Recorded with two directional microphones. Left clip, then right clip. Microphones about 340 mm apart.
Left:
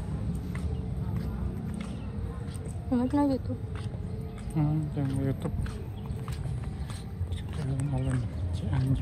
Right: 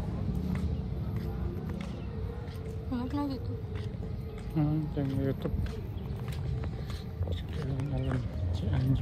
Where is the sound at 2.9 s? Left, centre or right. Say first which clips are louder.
Left 8 dB; left.